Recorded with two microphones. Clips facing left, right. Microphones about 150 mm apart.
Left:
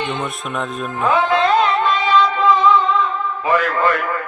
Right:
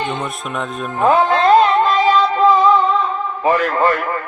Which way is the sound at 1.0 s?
40° right (ahead or behind).